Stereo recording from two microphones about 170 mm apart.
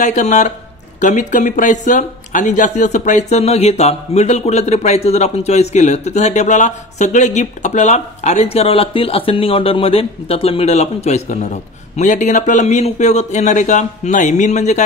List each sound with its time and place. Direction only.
0.0 s a man's voice: 45° left (ahead or behind)